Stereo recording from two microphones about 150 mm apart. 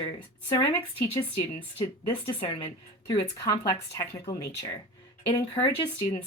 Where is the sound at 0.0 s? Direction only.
30° left (ahead or behind).